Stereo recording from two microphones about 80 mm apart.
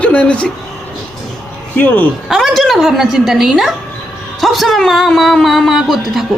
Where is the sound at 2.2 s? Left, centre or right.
Centre.